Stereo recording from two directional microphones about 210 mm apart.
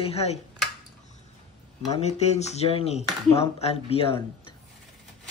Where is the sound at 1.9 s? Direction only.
30° left (ahead or behind).